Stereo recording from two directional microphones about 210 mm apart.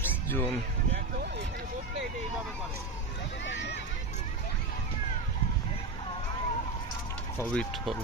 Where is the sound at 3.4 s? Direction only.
55° left (ahead or behind).